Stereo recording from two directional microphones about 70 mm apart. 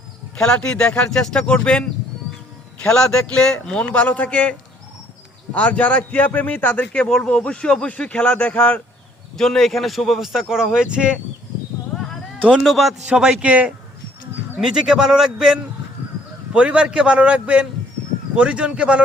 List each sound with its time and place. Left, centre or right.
0.3 s a man's voice: centre
5.5 s a man's voice: centre
9.4 s speech: centre
12.5 s a man's voice: centre
14.6 s a man's voice: centre
16.5 s a man's voice: centre